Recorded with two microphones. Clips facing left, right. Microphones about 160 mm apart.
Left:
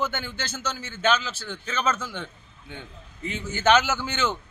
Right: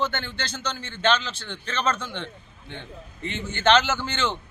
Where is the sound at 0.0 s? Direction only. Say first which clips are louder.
Right 1 dB; 10° left (ahead or behind).